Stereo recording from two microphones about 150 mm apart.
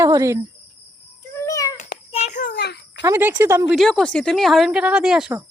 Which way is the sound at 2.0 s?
45° left (ahead or behind).